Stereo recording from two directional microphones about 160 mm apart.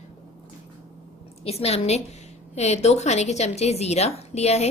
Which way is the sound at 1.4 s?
40° left (ahead or behind).